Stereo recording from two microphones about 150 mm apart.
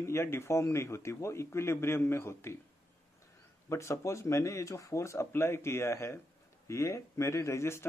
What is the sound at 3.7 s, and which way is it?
Speech, 20° left (ahead or behind).